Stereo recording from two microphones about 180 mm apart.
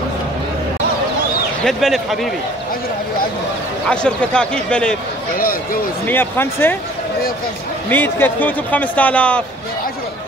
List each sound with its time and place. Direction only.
1.6 s speech: centre (ahead or behind)
3.9 s speech: 5° left (ahead or behind)
5.4 s speech: 50° left (ahead or behind)
6.0 s a man's voice: 10° left (ahead or behind)
7.9 s a man's voice: 10° left (ahead or behind)